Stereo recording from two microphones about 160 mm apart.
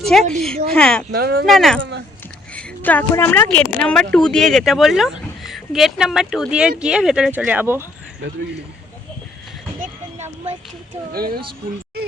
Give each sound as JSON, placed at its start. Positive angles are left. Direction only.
{"t": 0.0, "sound": "speech", "side_deg": 0}
{"t": 1.1, "sound": "speech", "side_deg": -80}
{"t": 1.5, "sound": "speech", "side_deg": 0}
{"t": 11.1, "sound": "speech", "side_deg": -70}